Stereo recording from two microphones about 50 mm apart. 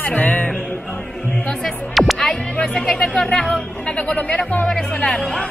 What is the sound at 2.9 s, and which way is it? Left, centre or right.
Speech, centre.